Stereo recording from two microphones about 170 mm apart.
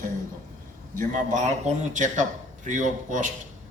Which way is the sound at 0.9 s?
45° right (ahead or behind).